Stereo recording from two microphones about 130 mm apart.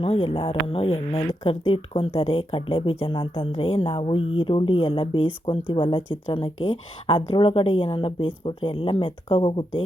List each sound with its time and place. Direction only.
0.0 s speech: 45° left (ahead or behind)